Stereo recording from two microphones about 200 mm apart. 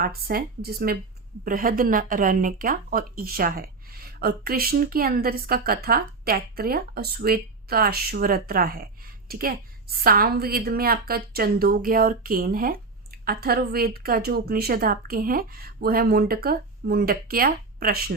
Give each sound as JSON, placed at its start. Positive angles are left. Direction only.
{"t": 0.0, "sound": "speech", "side_deg": -50}